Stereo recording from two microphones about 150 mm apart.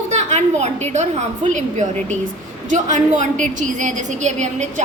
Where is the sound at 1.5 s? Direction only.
55° right (ahead or behind).